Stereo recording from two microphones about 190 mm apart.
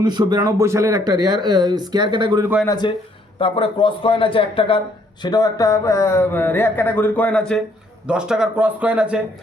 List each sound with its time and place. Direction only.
0.0 s speech: 20° right (ahead or behind)
2.6 s a man's voice: 20° left (ahead or behind); by 9.2 s 5° right (ahead or behind)